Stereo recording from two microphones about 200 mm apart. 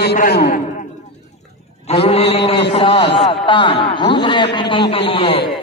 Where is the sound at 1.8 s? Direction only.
30° left (ahead or behind).